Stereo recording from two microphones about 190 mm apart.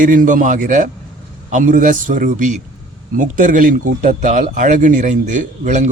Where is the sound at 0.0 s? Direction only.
45° right (ahead or behind).